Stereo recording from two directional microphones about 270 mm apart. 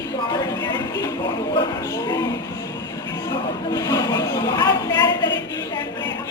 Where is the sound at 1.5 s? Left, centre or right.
Centre.